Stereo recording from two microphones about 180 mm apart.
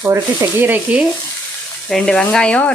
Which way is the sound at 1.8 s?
5° left (ahead or behind).